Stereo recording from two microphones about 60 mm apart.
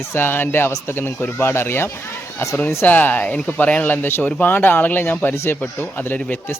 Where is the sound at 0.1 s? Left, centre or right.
Left.